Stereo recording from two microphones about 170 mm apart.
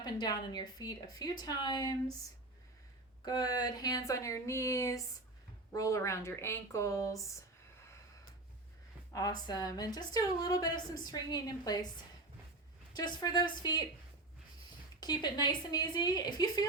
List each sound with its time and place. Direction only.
0.0 s a woman's voice: 25° left (ahead or behind)
3.2 s a woman's voice: 25° left (ahead or behind)
9.1 s a woman's voice: 20° left (ahead or behind)
13.0 s a woman's voice: 25° left (ahead or behind)
15.0 s a woman's voice: 25° left (ahead or behind)